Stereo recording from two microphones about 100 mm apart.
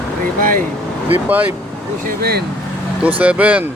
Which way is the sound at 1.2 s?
15° right (ahead or behind).